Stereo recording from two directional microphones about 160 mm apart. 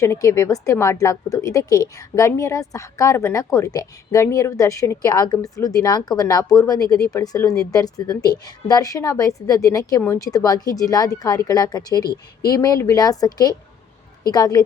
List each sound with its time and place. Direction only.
0.0 s a woman's voice: 20° left (ahead or behind)
12.0 s speech: 90° left
12.5 s a woman's voice: 20° left (ahead or behind)